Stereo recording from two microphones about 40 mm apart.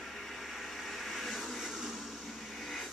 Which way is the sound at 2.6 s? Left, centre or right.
Centre.